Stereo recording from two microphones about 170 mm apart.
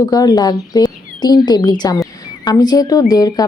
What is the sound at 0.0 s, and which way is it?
Speech, 20° left (ahead or behind).